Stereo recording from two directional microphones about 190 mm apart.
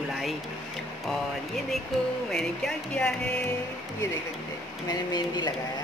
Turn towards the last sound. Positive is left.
turn(degrees=20)  # may be behind; listen again after turning